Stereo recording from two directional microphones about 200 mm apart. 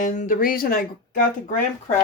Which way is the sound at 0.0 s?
40° left (ahead or behind).